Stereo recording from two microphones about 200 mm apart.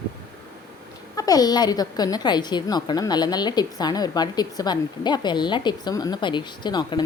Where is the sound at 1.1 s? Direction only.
20° left (ahead or behind).